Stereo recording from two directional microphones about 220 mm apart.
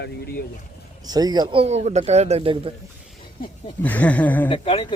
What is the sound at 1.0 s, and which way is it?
Speech, 15° right (ahead or behind).